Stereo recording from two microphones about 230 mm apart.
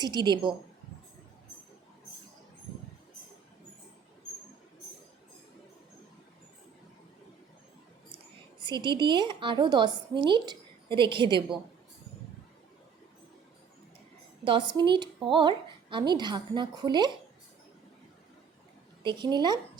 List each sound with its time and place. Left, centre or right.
0.0 s a woman's voice: centre
8.5 s a woman's voice: centre
14.4 s a woman's voice: right
19.0 s a woman's voice: centre